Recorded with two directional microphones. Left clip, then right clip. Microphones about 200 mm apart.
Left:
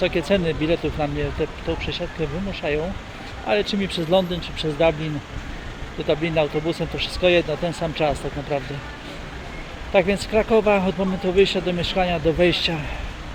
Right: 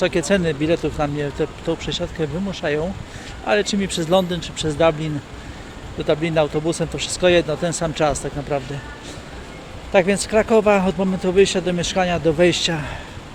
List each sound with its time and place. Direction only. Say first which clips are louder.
0.0 s speech: right 2 dB; 20° right (ahead or behind)
3.4 s speech: right 2 dB; 15° right (ahead or behind)
9.9 s speech: right 2 dB; 20° right (ahead or behind)